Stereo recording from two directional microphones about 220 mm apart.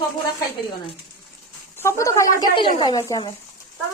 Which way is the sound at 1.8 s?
10° left (ahead or behind).